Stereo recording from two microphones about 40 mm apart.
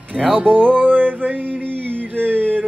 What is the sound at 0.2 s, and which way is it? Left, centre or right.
Music, left.